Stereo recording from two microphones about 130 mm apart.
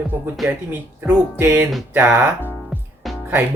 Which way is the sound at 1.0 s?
15° right (ahead or behind).